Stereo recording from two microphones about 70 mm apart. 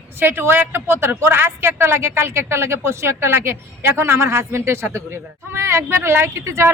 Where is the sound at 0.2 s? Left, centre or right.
Right.